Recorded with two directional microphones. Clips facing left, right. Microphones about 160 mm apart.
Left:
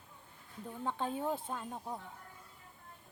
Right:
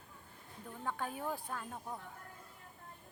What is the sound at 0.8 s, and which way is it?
A woman's voice, 20° left (ahead or behind).